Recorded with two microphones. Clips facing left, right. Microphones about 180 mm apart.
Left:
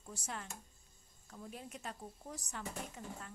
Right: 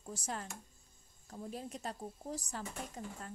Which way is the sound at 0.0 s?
35° right (ahead or behind).